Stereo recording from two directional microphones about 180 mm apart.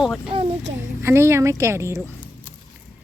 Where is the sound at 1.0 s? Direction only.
15° right (ahead or behind).